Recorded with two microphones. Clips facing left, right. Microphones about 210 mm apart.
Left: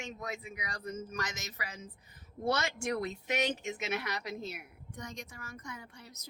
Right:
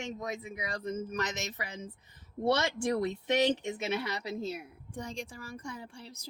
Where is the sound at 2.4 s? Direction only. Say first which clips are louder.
Right 4 dB; 30° right (ahead or behind).